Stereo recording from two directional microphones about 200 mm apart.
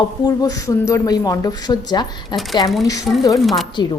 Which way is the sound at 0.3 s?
15° left (ahead or behind).